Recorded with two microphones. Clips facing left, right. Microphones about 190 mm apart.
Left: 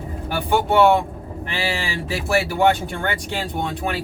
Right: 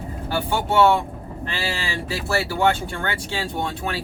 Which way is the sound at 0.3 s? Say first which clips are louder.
Left 3 dB; 15° left (ahead or behind).